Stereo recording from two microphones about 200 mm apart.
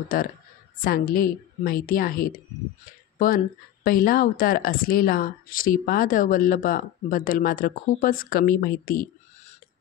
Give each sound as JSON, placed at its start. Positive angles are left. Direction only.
{"t": 0.1, "sound": "a woman's voice", "side_deg": 45}